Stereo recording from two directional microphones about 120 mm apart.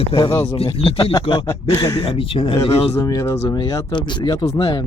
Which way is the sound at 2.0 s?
50° left (ahead or behind).